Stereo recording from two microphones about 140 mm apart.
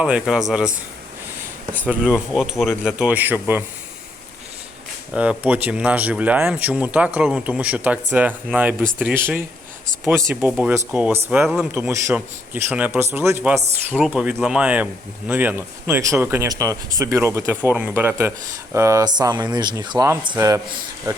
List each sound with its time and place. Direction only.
0.0 s speech: 5° right (ahead or behind)
1.9 s speech: 10° right (ahead or behind)
5.1 s speech: 10° right (ahead or behind)
11.4 s speech: 5° right (ahead or behind)
11.7 s speech: 20° right (ahead or behind)
13.9 s speech: 5° right (ahead or behind); by 20.1 s 30° right (ahead or behind)
21.1 s speech: 25° right (ahead or behind)